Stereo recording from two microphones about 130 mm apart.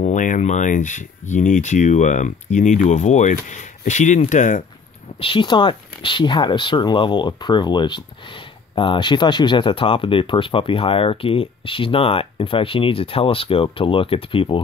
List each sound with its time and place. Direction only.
0.0 s speech: 80° left
5.2 s speech: 40° left (ahead or behind)